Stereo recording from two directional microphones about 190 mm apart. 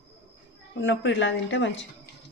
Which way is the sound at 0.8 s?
75° left (ahead or behind).